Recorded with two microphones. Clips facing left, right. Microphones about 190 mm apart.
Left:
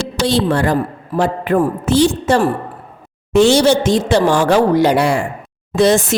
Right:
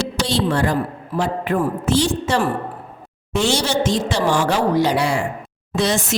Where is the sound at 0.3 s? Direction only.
60° left (ahead or behind).